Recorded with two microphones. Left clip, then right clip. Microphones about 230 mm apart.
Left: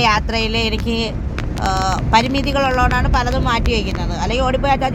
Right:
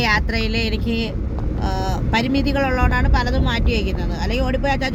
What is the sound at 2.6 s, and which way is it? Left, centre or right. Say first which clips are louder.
Speech: left 7 dB; left.